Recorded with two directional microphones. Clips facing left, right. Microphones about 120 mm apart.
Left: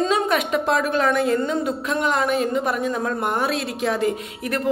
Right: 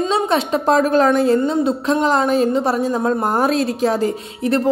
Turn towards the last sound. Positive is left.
turn(degrees=-30)  # may be behind; listen again after turning